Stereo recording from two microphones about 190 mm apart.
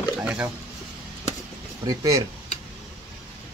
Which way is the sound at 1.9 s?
15° right (ahead or behind).